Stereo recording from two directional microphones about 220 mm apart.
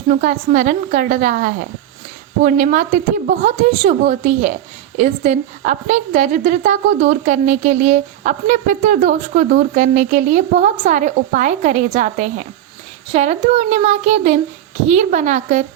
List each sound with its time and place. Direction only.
0.1 s a woman's voice: 35° right (ahead or behind)